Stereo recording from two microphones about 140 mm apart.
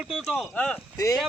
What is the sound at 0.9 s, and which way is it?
Speech, 25° left (ahead or behind).